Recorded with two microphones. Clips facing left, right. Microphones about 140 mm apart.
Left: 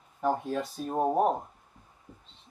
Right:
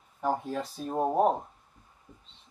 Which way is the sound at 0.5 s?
Centre (ahead or behind).